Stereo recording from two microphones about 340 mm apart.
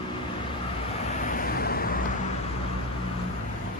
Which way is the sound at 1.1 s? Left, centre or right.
Left.